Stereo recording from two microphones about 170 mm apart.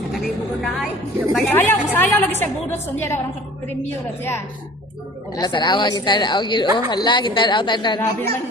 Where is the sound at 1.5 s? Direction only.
15° left (ahead or behind).